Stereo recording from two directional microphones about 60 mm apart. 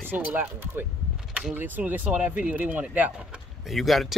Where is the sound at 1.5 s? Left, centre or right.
Right.